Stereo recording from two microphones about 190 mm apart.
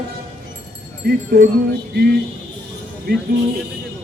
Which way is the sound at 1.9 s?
55° right (ahead or behind).